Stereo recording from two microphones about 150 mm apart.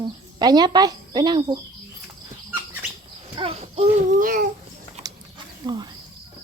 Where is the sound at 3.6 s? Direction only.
50° right (ahead or behind).